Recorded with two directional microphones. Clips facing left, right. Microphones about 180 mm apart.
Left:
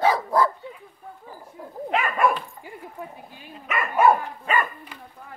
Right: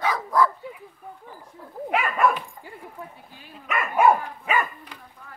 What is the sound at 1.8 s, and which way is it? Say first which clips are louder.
Dog: even; 10° right (ahead or behind).